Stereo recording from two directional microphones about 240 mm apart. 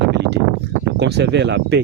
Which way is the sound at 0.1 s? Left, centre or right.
Right.